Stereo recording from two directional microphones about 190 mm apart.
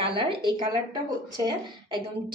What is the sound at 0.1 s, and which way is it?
Speech, 25° right (ahead or behind).